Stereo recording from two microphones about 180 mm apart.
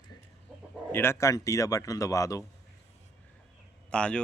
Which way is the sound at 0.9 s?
15° left (ahead or behind).